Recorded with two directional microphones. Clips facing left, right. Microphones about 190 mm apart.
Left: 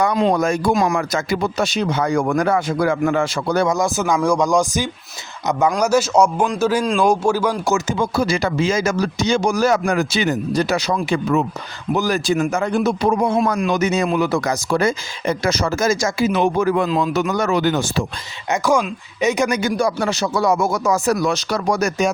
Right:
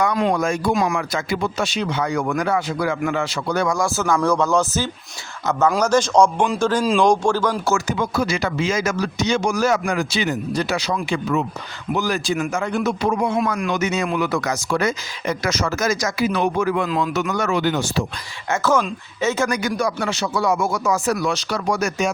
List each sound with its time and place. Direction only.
0.0 s speech: 25° left (ahead or behind)
0.3 s speech: 40° left (ahead or behind)
3.7 s speech: 20° left (ahead or behind)
7.9 s a man's voice: 30° left (ahead or behind)
16.6 s a man's voice: 40° left (ahead or behind)
18.5 s a man's voice: 15° left (ahead or behind); by 22.1 s 40° left (ahead or behind)